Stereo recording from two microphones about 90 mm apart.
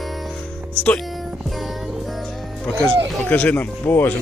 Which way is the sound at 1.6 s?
Centre (ahead or behind).